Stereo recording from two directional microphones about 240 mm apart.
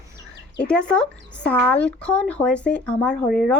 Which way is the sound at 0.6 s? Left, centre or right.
Centre.